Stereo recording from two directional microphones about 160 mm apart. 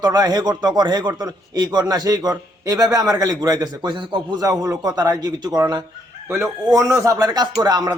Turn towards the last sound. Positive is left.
turn(degrees=-25)  # may be behind; listen again after turning